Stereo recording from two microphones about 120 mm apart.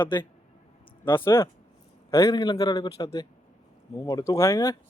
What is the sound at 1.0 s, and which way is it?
A man's voice, 20° left (ahead or behind).